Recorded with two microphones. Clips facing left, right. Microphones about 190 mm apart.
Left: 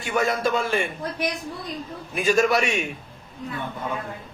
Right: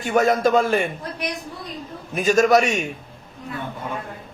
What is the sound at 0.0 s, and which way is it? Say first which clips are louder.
Speech: right 5 dB; 45° right (ahead or behind).